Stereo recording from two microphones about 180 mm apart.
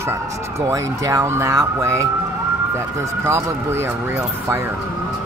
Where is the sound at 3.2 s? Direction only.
15° right (ahead or behind).